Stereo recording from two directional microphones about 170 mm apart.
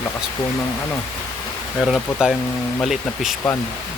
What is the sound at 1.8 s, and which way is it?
Speech, centre (ahead or behind).